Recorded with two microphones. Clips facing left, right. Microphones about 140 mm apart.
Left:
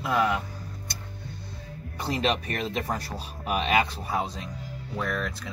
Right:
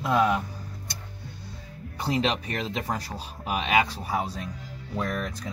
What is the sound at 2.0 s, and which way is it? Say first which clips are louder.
Speech: right 1 dB; 15° right (ahead or behind).